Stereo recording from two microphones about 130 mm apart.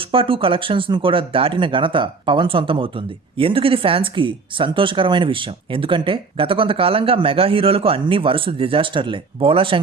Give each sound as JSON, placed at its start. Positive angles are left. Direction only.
{"t": 0.1, "sound": "speech", "side_deg": -45}